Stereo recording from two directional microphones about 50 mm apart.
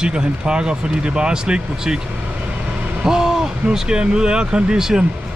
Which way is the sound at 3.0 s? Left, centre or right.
Centre.